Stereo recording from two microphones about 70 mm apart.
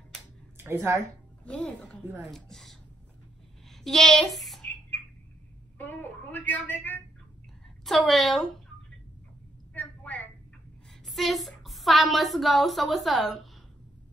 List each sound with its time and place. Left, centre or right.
0.6 s a woman's voice: right
1.4 s speech: centre
2.3 s speech: centre
3.8 s speech: centre
5.8 s a woman's voice: left
7.8 s a woman's voice: centre
9.8 s a sound: left
11.1 s a woman's voice: centre